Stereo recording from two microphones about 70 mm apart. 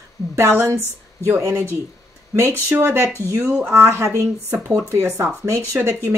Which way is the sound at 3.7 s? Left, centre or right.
Right.